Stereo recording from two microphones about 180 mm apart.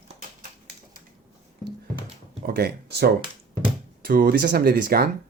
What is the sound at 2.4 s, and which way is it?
Speech, 60° right (ahead or behind).